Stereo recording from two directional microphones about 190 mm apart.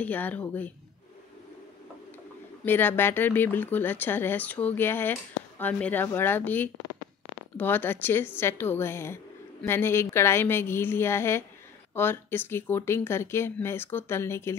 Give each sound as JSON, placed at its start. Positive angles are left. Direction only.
{"t": 0.0, "sound": "speech", "side_deg": 10}
{"t": 2.6, "sound": "speech", "side_deg": 10}